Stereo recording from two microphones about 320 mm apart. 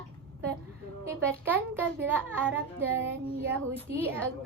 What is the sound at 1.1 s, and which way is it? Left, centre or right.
A woman's voice, centre.